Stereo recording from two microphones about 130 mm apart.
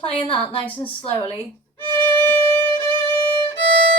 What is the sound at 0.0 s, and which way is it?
Speech, 45° left (ahead or behind).